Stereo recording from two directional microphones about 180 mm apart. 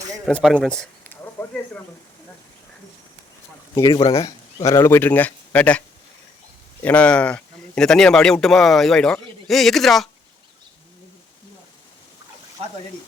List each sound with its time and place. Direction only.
0.3 s speech: centre (ahead or behind)
3.8 s speech: 25° left (ahead or behind)
4.2 s speech: 20° left (ahead or behind)
6.8 s speech: 5° left (ahead or behind)